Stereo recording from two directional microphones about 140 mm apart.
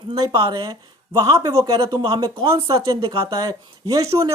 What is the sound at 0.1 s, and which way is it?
Speech, 30° right (ahead or behind).